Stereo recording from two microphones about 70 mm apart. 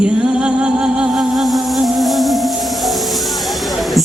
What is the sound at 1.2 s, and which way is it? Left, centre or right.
Music, centre.